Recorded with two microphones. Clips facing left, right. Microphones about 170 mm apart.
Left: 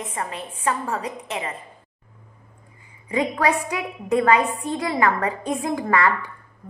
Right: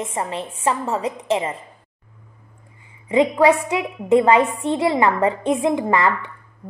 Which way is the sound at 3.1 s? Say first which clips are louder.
Right 6 dB; 25° right (ahead or behind).